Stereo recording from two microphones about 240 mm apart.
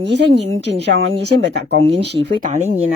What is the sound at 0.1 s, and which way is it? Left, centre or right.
Speech, right.